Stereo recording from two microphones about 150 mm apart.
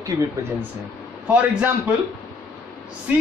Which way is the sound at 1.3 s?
10° right (ahead or behind).